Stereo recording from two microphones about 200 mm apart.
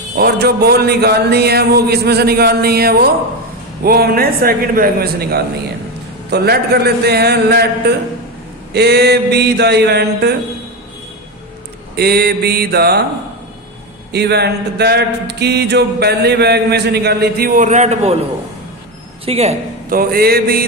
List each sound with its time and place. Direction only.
0.2 s speech: 50° right (ahead or behind)
8.7 s a sound: 55° right (ahead or behind)
11.9 s speech: 50° right (ahead or behind)
14.1 s a sound: 55° right (ahead or behind); by 18.2 s 35° right (ahead or behind)
19.2 s speech: 30° right (ahead or behind)
19.9 s speech: 50° right (ahead or behind)